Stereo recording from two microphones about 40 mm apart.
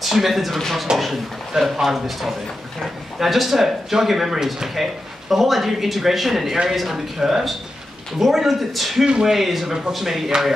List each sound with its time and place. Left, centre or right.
0.0 s speech: centre
0.9 s speech: centre
1.6 s speech: centre
9.0 s speech: right
9.3 s speech: centre